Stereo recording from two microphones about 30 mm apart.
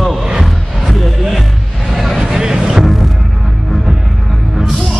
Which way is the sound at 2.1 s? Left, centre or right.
Right.